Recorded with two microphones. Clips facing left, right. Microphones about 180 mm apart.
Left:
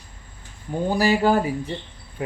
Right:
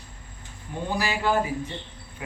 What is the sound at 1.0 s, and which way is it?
Speech, 40° left (ahead or behind).